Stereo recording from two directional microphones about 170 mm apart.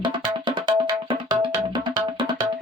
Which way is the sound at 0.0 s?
25° right (ahead or behind).